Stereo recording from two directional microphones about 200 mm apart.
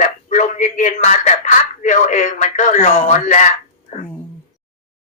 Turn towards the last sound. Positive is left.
turn(degrees=35)  # may be behind; listen again after turning